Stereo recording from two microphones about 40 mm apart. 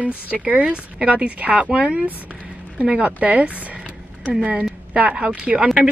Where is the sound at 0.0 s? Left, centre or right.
Right.